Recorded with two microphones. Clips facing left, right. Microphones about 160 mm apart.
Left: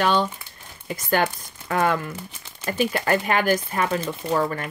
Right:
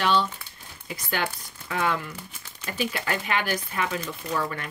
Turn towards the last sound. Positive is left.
turn(degrees=35)  # may be behind; listen again after turning